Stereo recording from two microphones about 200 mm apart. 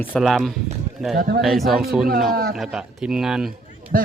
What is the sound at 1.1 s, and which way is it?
Speech, 50° right (ahead or behind).